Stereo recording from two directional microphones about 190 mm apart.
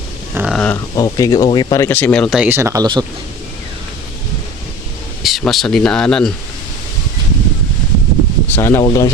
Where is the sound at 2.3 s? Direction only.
10° right (ahead or behind).